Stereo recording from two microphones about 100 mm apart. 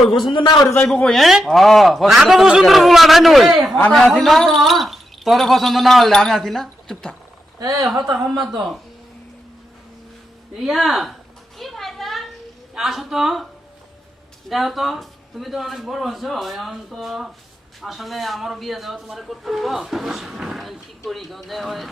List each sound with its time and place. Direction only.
0.1 s a man's voice: 50° left (ahead or behind)
1.0 s speech: centre (ahead or behind)
7.6 s speech: 40° right (ahead or behind)
7.9 s speech: centre (ahead or behind)
10.6 s speech: centre (ahead or behind)
11.5 s a sound: centre (ahead or behind)
12.7 s speech: 5° right (ahead or behind)
14.5 s speech: centre (ahead or behind)